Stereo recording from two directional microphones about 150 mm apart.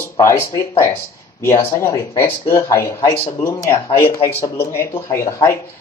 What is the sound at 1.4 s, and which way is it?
Speech, 20° left (ahead or behind).